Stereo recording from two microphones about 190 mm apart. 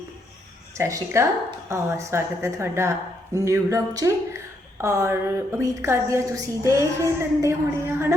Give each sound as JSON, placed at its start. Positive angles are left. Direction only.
{"t": 0.8, "sound": "a woman's voice", "side_deg": -15}